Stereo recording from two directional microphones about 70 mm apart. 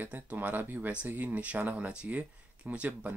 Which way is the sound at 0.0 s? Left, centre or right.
Right.